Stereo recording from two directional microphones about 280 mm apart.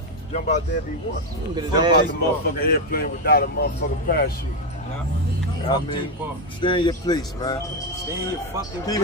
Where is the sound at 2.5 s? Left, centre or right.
Left.